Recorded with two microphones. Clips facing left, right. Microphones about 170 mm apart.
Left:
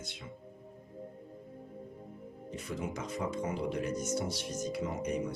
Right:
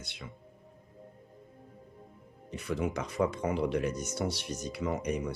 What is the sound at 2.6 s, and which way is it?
Speech, 70° right (ahead or behind).